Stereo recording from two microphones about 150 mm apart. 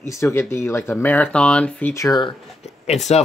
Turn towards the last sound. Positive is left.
turn(degrees=45)  # may be behind; listen again after turning